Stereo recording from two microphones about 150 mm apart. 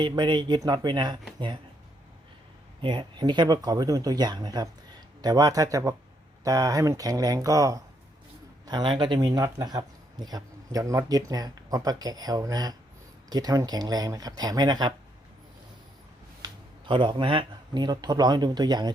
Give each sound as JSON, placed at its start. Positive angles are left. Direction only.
{"t": 0.0, "sound": "speech", "side_deg": -30}
{"t": 2.8, "sound": "speech", "side_deg": -30}
{"t": 16.4, "sound": "speech", "side_deg": -30}